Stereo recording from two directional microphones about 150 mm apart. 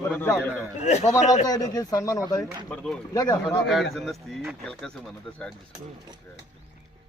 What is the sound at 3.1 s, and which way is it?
Speech, 25° left (ahead or behind).